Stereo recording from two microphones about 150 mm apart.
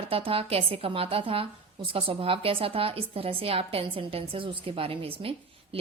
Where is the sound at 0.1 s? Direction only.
40° right (ahead or behind).